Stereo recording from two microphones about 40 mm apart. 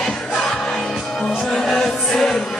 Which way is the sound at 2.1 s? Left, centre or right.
Centre.